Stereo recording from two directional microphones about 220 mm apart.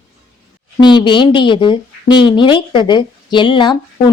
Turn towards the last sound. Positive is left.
turn(degrees=20)  # may be behind; listen again after turning